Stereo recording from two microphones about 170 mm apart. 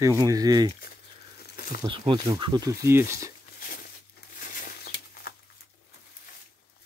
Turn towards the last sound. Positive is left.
turn(degrees=60)  # may be behind; listen again after turning